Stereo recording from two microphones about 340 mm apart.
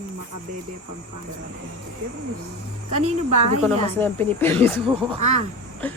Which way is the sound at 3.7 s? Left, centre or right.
Centre.